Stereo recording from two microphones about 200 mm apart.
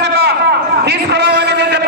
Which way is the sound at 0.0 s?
55° right (ahead or behind).